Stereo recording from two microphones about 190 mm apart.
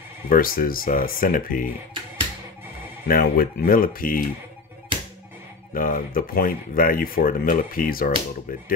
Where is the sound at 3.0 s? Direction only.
50° left (ahead or behind).